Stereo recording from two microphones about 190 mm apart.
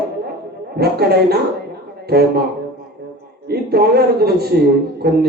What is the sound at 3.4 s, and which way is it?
A man's voice, 55° right (ahead or behind).